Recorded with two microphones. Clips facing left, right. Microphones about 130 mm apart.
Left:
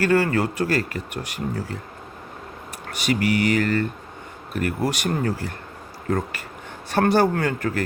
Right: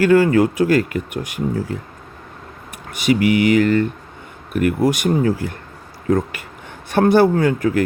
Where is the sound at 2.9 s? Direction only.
50° left (ahead or behind).